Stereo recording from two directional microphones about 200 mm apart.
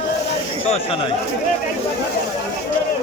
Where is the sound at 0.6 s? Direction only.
30° left (ahead or behind).